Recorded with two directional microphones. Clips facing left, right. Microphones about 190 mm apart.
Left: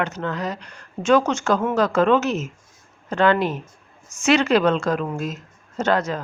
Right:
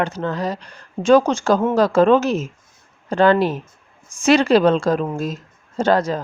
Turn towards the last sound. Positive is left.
turn(degrees=-35)  # may be behind; listen again after turning